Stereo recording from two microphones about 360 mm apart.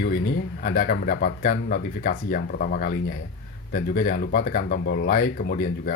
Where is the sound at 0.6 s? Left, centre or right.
Left.